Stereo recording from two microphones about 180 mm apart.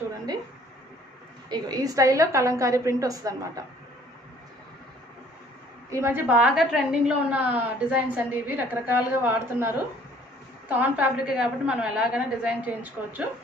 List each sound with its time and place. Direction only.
1.5 s a woman's voice: 20° right (ahead or behind)
5.9 s a woman's voice: 15° right (ahead or behind)
10.7 s a woman's voice: 10° right (ahead or behind)